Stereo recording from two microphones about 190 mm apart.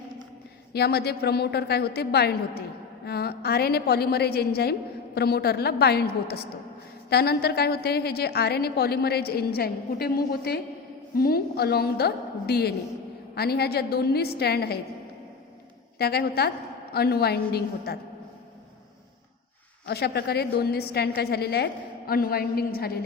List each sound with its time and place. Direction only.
0.7 s a woman's voice: 55° left (ahead or behind)
16.0 s a woman's voice: 55° left (ahead or behind)
19.9 s a woman's voice: 55° left (ahead or behind)